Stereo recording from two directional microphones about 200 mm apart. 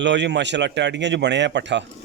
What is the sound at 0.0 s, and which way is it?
A man's voice, 60° right (ahead or behind).